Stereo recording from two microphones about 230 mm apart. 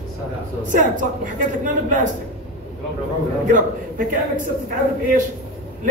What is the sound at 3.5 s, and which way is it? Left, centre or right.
Speech, right.